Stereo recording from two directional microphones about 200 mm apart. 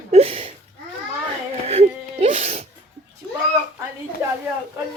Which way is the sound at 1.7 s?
30° right (ahead or behind).